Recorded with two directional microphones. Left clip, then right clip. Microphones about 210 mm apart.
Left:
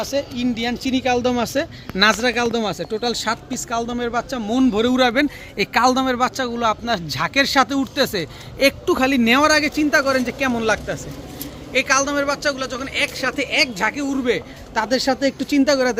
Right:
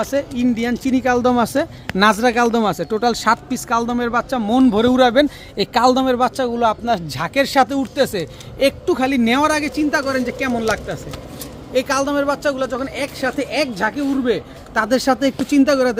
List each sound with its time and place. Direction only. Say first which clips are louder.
0.0 s speech: right 3 dB; 50° right (ahead or behind); by 11.0 s 15° right (ahead or behind)
11.7 s speech: even; 35° right (ahead or behind)